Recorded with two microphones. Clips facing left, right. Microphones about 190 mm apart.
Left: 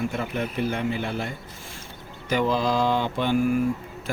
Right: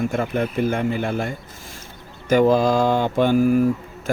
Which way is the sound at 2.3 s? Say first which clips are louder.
Right 7 dB; 45° right (ahead or behind).